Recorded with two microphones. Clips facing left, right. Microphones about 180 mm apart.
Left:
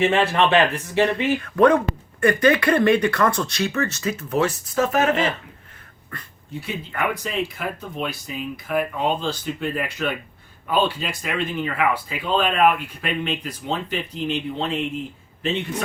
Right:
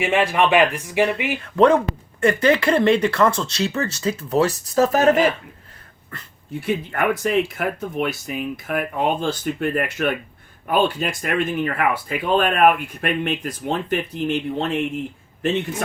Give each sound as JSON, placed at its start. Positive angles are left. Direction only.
{"t": 0.0, "sound": "speech", "side_deg": -10}
{"t": 1.5, "sound": "speech", "side_deg": -25}
{"t": 6.6, "sound": "speech", "side_deg": -55}